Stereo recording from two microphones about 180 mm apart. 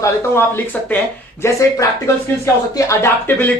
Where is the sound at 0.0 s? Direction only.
10° left (ahead or behind).